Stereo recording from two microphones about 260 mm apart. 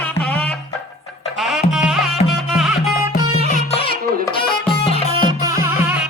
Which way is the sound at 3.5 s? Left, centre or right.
Left.